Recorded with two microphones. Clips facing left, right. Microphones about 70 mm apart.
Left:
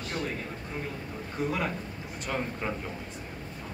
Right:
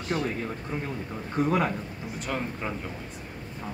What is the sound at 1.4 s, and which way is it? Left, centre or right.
Speech, right.